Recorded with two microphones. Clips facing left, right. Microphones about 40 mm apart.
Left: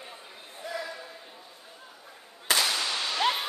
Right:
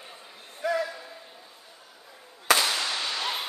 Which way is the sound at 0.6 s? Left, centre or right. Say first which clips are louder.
Right 9 dB; right.